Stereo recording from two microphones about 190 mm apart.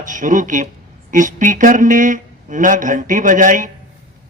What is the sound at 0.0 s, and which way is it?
A man's voice, 40° right (ahead or behind).